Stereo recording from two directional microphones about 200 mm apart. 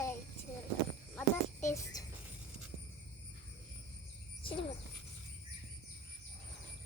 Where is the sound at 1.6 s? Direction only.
15° left (ahead or behind).